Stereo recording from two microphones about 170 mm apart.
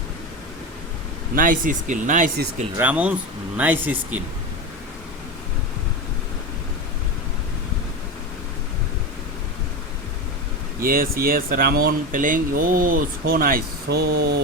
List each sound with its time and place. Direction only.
1.4 s speech: 50° right (ahead or behind)
2.7 s speech: 10° right (ahead or behind)
10.8 s speech: 60° right (ahead or behind)